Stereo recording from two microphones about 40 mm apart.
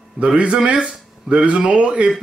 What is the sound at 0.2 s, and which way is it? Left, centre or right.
Speech, right.